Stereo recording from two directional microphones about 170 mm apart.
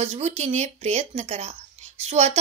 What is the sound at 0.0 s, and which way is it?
Speech, 40° right (ahead or behind).